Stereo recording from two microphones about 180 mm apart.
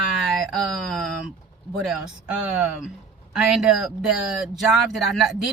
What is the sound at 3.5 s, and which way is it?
Speech, centre (ahead or behind).